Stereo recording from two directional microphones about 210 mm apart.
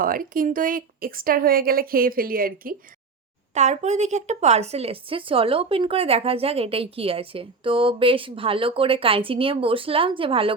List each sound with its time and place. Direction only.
0.0 s speech: 40° right (ahead or behind); by 10.5 s 25° right (ahead or behind)